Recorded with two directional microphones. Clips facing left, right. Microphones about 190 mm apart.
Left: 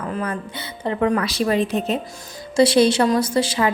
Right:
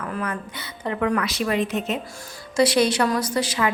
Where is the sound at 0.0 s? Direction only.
30° left (ahead or behind).